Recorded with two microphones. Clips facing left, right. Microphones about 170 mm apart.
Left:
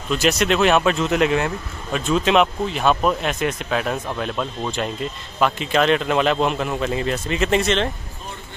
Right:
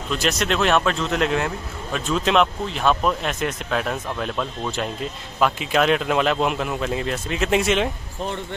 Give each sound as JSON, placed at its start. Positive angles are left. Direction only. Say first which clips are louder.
{"t": 0.1, "sound": "speech", "louder": "left 4 dB", "side_deg": 5}